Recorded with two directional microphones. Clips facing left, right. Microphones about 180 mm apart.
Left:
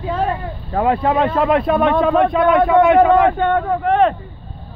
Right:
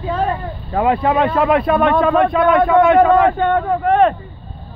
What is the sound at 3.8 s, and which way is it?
Speech, 50° right (ahead or behind).